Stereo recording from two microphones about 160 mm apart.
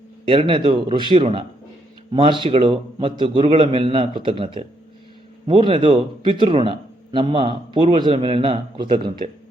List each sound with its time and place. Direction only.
0.3 s a man's voice: 35° right (ahead or behind)